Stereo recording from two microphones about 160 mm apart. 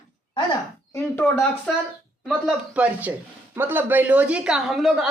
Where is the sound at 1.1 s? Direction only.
10° left (ahead or behind).